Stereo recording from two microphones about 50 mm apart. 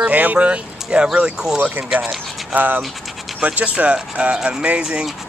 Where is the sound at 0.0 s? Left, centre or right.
Right; by 1.6 s centre.